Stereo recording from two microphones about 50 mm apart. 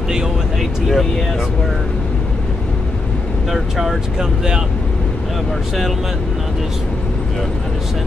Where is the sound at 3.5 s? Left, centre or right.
Centre.